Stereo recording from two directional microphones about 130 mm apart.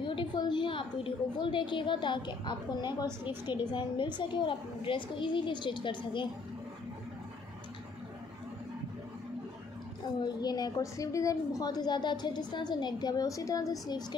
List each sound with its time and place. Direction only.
0.0 s a woman's voice: 40° left (ahead or behind)
10.2 s a woman's voice: 30° left (ahead or behind)